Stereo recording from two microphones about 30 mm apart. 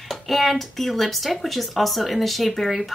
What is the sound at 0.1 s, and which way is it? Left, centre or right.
Speech, centre.